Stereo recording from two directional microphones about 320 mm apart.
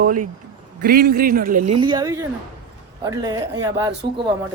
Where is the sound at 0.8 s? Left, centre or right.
Right.